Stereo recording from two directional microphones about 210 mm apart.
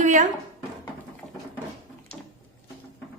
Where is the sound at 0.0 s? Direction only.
35° right (ahead or behind).